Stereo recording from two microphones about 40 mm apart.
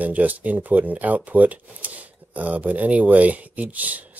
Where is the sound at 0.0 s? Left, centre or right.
Right.